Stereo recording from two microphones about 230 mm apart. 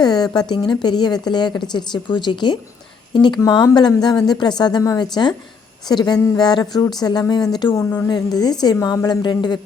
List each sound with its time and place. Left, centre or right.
0.0 s a woman's voice: centre